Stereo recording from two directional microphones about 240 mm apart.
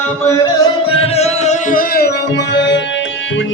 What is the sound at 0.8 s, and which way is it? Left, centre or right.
Music, left.